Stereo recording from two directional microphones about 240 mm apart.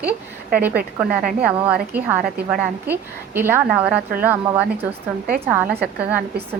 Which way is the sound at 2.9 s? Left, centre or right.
Centre.